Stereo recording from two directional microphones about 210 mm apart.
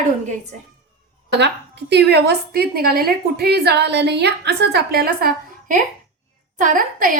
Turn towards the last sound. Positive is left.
turn(degrees=-40)  # may be behind; listen again after turning